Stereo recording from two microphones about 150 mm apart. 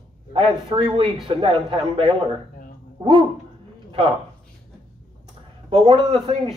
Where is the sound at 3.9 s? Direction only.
35° right (ahead or behind).